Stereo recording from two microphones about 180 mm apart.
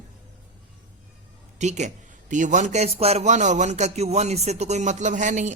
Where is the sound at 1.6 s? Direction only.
40° right (ahead or behind).